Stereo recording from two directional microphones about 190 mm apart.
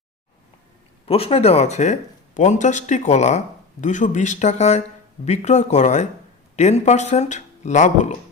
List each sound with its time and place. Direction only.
1.0 s speech: 30° left (ahead or behind)